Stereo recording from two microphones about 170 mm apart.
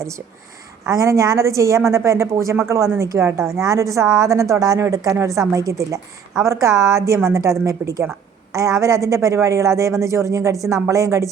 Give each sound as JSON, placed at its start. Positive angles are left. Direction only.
{"t": 0.9, "sound": "a woman's voice", "side_deg": -20}